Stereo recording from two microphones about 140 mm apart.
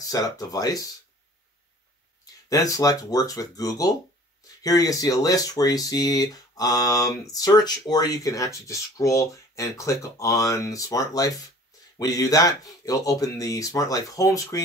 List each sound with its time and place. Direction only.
0.0 s speech: 25° left (ahead or behind)
2.5 s speech: 25° left (ahead or behind)